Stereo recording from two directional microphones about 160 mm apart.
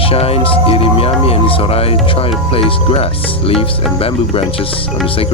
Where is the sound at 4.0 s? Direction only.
35° left (ahead or behind).